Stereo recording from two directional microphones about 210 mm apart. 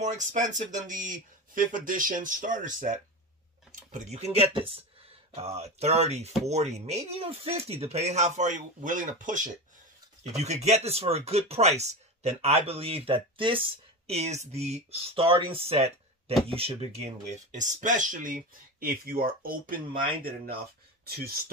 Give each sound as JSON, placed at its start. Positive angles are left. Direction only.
{"t": 0.0, "sound": "speech", "side_deg": -35}
{"t": 15.7, "sound": "a sound", "side_deg": -30}
{"t": 16.5, "sound": "speech", "side_deg": -30}